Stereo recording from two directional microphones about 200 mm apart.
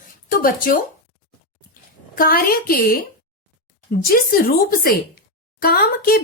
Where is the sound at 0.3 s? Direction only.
45° left (ahead or behind).